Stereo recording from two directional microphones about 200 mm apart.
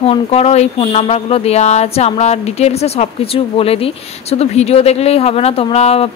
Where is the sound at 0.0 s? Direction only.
30° left (ahead or behind).